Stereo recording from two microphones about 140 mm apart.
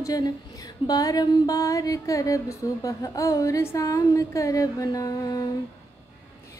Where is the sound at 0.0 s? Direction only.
30° left (ahead or behind).